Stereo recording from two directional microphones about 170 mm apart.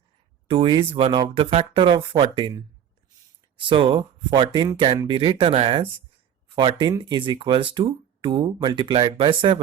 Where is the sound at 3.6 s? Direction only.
30° right (ahead or behind).